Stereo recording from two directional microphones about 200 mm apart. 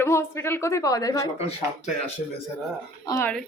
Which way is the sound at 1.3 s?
30° left (ahead or behind).